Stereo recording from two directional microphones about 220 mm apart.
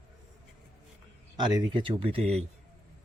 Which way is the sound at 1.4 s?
20° right (ahead or behind).